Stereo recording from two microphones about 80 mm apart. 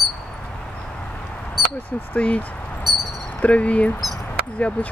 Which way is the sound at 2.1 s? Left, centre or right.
Centre.